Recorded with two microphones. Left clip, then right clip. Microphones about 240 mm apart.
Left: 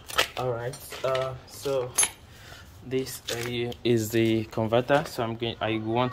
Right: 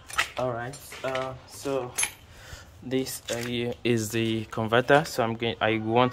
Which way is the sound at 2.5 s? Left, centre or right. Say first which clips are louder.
Right 1 dB; right.